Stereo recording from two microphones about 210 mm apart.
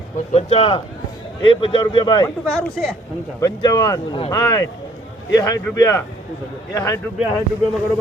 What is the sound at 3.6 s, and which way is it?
A man's voice, 20° left (ahead or behind).